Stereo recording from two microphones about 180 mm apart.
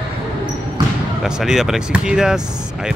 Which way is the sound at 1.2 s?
Centre (ahead or behind).